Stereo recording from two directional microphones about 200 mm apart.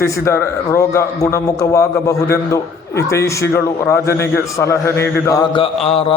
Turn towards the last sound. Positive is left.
turn(degrees=30)  # may be behind; listen again after turning